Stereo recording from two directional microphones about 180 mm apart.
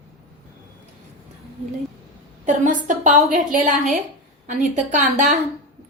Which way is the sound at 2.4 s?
45° right (ahead or behind).